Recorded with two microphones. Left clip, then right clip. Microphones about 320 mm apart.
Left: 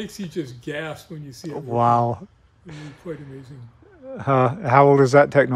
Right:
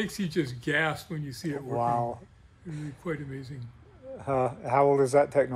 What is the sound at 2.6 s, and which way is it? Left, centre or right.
Speech, left.